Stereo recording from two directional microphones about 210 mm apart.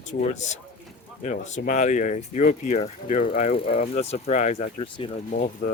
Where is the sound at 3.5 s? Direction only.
25° left (ahead or behind).